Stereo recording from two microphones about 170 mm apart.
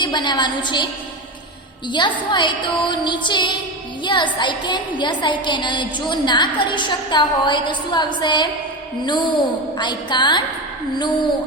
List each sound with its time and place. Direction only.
0.0 s a woman's voice: 25° left (ahead or behind)
1.9 s a woman's voice: 25° left (ahead or behind)